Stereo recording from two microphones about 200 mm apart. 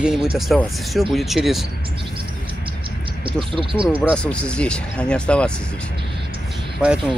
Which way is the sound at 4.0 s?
5° left (ahead or behind).